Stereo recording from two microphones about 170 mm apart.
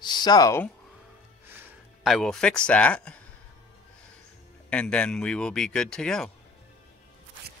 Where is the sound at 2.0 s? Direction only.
Centre (ahead or behind).